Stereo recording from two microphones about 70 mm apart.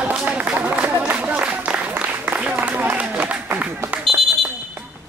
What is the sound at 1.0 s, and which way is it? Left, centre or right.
Applause, right.